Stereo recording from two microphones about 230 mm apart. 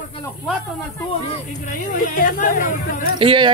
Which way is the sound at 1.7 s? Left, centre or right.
Left.